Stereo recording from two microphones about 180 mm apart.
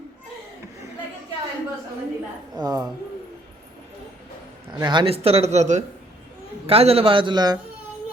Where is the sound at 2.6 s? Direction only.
20° right (ahead or behind).